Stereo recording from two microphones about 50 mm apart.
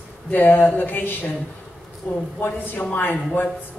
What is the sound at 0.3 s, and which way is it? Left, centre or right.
Speech, left.